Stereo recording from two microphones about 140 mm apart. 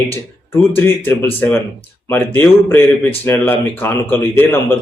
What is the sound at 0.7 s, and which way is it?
Speech, 15° left (ahead or behind).